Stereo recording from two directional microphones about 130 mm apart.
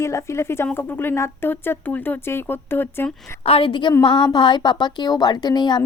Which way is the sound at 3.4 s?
45° left (ahead or behind).